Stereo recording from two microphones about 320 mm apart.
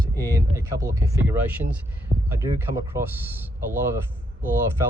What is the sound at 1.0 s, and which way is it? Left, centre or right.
Speech, centre.